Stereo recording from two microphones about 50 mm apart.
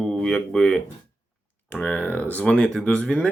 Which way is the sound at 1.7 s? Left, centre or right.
Left.